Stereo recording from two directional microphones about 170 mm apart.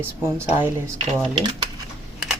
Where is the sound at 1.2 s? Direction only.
30° right (ahead or behind).